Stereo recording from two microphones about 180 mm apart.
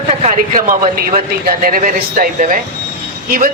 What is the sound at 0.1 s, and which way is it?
Speech, 40° right (ahead or behind).